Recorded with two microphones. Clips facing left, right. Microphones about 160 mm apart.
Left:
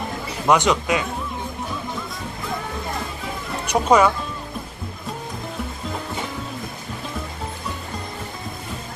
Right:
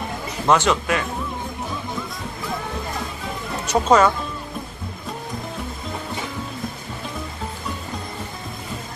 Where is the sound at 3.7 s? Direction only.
10° left (ahead or behind).